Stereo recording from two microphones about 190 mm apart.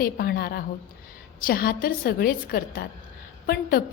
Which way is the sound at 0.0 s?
50° left (ahead or behind).